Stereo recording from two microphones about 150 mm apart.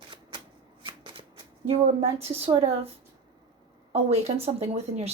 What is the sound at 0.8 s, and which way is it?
Shuffling cards, 35° right (ahead or behind).